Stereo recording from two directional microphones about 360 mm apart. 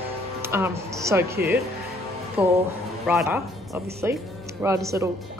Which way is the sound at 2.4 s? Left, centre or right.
Centre.